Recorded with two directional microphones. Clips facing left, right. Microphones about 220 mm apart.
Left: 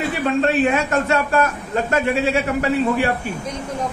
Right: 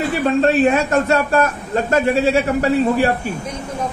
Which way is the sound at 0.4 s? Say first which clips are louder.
Right 3 dB; 35° right (ahead or behind).